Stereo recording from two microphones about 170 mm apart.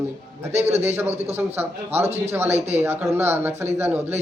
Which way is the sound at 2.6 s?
40° right (ahead or behind).